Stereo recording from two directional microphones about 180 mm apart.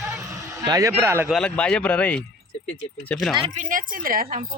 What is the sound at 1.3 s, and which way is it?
Speech, 5° left (ahead or behind).